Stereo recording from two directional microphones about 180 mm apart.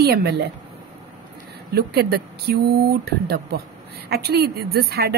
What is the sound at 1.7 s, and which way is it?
A woman's voice, 60° right (ahead or behind).